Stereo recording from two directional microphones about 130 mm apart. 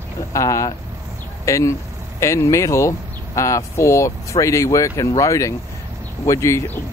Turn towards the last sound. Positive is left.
turn(degrees=25)  # may be behind; listen again after turning